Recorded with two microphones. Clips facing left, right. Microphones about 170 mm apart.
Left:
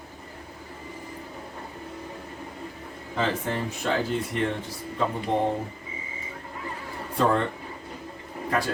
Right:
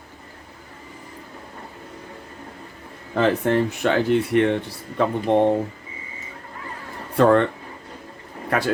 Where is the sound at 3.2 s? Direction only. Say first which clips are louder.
Right 8 dB; 65° right (ahead or behind).